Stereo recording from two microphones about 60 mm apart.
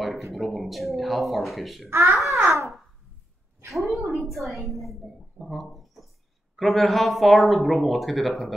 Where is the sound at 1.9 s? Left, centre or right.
Right.